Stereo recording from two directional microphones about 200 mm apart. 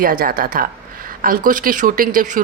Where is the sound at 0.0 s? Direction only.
45° right (ahead or behind).